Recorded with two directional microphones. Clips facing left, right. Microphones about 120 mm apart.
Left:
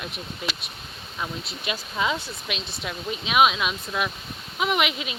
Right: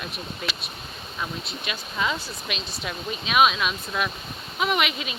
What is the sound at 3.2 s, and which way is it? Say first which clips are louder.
Speech: even; 15° left (ahead or behind).